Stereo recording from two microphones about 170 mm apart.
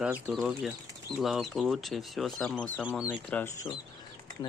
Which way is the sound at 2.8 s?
5° right (ahead or behind).